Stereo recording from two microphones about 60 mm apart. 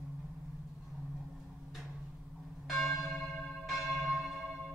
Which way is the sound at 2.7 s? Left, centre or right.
Centre.